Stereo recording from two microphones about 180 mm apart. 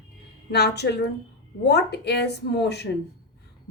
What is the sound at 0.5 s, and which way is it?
Speech, 65° left (ahead or behind).